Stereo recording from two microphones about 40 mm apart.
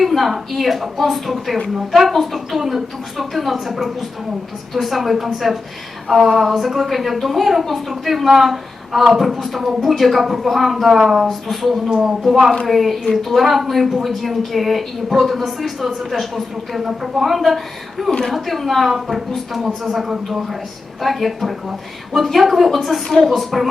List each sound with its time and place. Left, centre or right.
0.0 s speech: centre
11.9 s speech: centre
12.6 s speech: centre